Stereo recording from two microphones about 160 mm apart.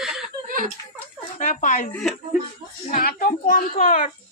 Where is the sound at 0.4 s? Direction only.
60° right (ahead or behind).